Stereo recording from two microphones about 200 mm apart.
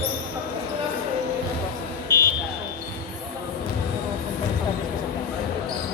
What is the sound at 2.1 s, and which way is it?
Buzzer, 20° right (ahead or behind).